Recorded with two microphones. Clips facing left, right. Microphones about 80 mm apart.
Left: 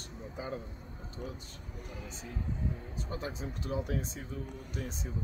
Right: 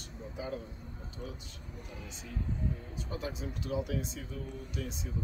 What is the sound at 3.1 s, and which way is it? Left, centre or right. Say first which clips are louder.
Speech: right 1 dB; left.